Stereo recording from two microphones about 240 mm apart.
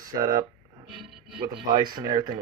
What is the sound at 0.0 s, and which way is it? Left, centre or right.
Speech, centre.